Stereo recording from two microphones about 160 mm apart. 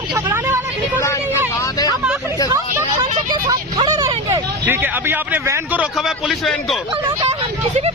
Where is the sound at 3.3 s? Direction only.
25° right (ahead or behind); by 6.8 s centre (ahead or behind).